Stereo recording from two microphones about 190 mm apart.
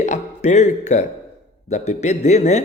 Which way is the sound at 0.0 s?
40° left (ahead or behind).